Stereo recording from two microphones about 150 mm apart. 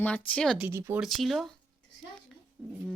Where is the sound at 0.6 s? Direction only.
10° right (ahead or behind).